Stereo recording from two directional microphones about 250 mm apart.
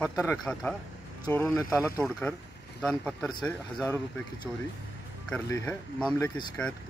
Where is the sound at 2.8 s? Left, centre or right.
Centre.